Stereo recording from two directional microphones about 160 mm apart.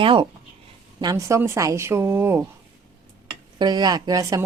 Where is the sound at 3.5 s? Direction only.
25° right (ahead or behind).